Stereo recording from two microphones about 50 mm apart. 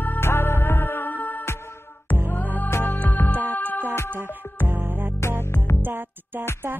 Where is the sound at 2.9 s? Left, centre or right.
Left.